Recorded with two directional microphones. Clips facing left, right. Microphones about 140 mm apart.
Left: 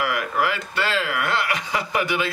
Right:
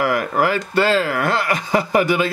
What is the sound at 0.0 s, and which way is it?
Speech, 40° right (ahead or behind).